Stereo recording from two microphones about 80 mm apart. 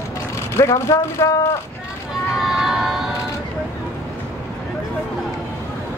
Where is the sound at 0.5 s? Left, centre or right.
Left.